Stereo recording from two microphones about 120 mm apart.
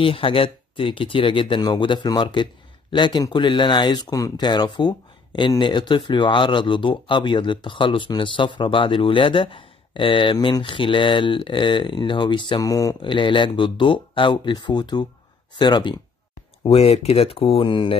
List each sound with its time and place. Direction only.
0.0 s speech: 50° left (ahead or behind); by 12.9 s 30° left (ahead or behind)
13.0 s speech: 45° left (ahead or behind)
16.6 s speech: 55° left (ahead or behind)